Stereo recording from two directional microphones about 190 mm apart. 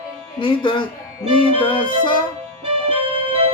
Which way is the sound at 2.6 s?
30° right (ahead or behind).